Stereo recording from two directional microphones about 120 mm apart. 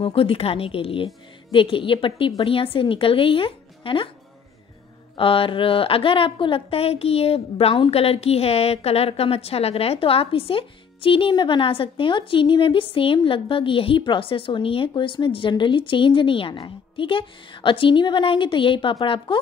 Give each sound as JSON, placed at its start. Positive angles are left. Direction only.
{"t": 0.0, "sound": "a woman's voice", "side_deg": 50}
{"t": 5.1, "sound": "a woman's voice", "side_deg": 50}